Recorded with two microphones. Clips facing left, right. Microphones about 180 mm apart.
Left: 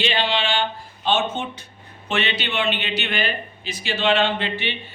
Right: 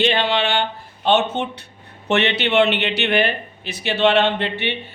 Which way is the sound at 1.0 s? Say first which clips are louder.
Right 4 dB; 65° right (ahead or behind).